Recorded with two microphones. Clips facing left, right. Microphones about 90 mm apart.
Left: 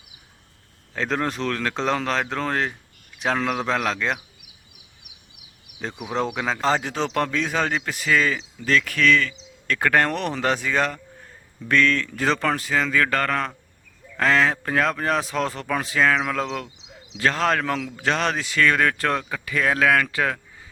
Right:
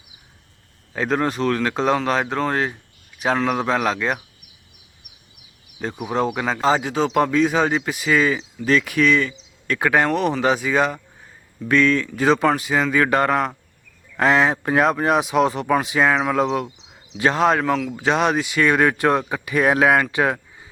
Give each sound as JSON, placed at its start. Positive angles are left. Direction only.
{"t": 0.9, "sound": "speech", "side_deg": -5}
{"t": 5.8, "sound": "speech", "side_deg": -5}